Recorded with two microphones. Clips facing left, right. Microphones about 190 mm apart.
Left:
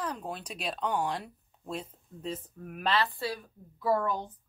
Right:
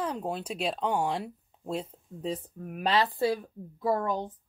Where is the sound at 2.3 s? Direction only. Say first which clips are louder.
Right 4 dB; 35° right (ahead or behind).